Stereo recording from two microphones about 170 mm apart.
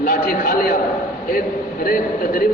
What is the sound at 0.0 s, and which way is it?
Speech, 55° left (ahead or behind).